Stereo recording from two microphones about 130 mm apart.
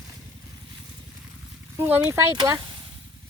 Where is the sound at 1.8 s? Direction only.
15° right (ahead or behind).